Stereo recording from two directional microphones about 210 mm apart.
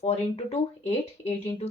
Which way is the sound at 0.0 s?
30° left (ahead or behind).